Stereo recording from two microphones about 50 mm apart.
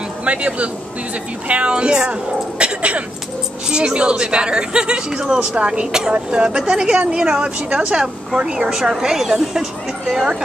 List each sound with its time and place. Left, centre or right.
0.2 s speech: right
2.6 s dog: right
3.7 s a man's voice: centre